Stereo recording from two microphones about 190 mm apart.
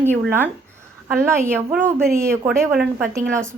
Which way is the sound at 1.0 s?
10° right (ahead or behind).